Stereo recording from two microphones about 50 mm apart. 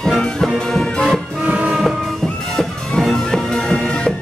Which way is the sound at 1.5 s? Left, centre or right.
Right.